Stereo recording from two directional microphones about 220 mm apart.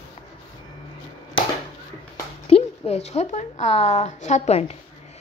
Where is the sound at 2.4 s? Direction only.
25° left (ahead or behind).